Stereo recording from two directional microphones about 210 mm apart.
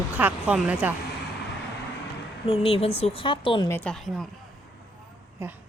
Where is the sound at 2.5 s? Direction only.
30° left (ahead or behind).